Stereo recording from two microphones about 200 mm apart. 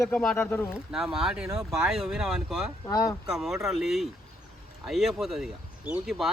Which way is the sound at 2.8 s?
20° left (ahead or behind).